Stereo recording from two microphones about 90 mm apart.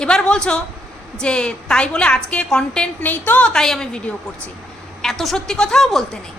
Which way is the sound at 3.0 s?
20° left (ahead or behind).